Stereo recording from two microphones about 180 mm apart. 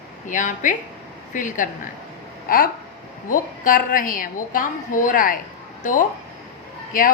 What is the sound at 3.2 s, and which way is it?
A woman's voice, 50° left (ahead or behind).